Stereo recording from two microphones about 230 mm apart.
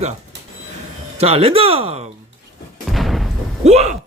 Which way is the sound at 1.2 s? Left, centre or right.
Right.